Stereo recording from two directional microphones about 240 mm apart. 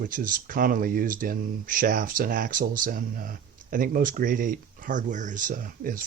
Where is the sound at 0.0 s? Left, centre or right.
Right.